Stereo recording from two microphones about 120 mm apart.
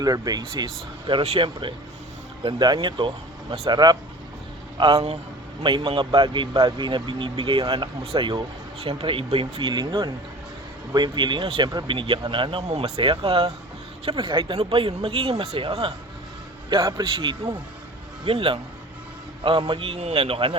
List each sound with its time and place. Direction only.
0.0 s speech: 30° right (ahead or behind)
1.2 s speech: 50° right (ahead or behind)
2.4 s speech: 40° right (ahead or behind)
4.8 s speech: 55° right (ahead or behind)
12.6 s speech: 65° right (ahead or behind)
13.0 s speech: 50° right (ahead or behind)
14.2 s speech: 40° right (ahead or behind)
17.0 s speech: 40° right (ahead or behind)
20.0 s speech: 60° right (ahead or behind)